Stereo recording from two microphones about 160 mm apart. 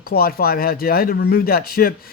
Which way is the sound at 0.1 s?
70° left (ahead or behind).